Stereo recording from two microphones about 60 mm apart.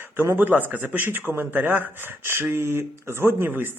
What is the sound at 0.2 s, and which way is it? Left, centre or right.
A man's voice, right.